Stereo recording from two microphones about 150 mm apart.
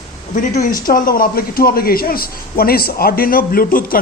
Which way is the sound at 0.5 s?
60° left (ahead or behind).